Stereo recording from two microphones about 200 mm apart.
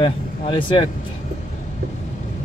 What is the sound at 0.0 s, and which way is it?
Speech, 25° left (ahead or behind).